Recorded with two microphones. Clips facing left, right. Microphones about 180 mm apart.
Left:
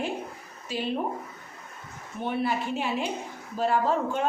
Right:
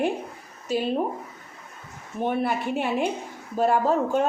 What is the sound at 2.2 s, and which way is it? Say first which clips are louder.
A woman's voice: right 3 dB; 50° right (ahead or behind).